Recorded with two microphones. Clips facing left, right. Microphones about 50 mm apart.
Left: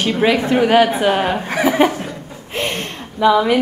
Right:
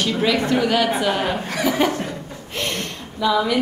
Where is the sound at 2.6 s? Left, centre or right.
Left.